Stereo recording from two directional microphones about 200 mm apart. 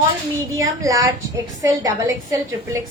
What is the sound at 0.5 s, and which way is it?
A child's voice, 15° right (ahead or behind).